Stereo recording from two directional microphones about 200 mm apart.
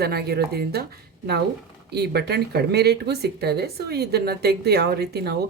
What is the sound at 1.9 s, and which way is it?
Speech, 55° right (ahead or behind).